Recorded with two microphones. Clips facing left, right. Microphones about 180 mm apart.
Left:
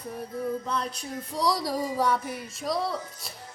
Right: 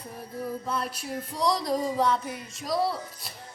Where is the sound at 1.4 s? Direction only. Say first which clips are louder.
Right 2 dB; 5° left (ahead or behind).